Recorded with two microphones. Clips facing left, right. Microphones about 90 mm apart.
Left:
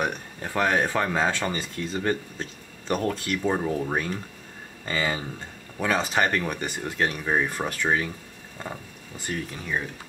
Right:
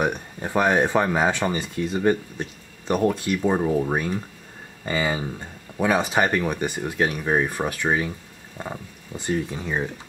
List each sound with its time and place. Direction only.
0.0 s speech: 15° right (ahead or behind)